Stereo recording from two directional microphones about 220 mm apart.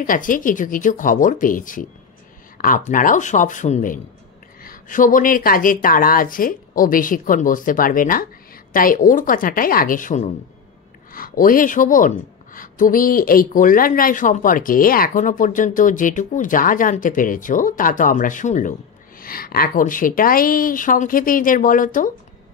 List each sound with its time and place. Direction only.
0.0 s speech: 40° left (ahead or behind)